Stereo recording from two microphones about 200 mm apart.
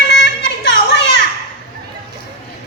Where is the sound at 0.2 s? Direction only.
55° left (ahead or behind).